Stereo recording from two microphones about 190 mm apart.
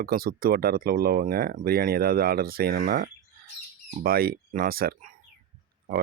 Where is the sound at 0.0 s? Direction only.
50° right (ahead or behind).